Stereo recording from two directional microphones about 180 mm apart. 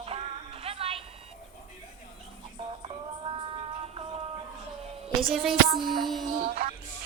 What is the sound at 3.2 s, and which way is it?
Music, 30° right (ahead or behind).